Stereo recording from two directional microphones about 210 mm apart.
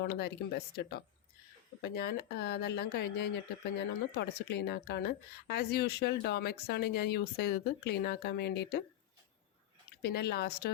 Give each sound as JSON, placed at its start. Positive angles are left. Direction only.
{"t": 0.0, "sound": "speech", "side_deg": 50}
{"t": 10.0, "sound": "speech", "side_deg": 50}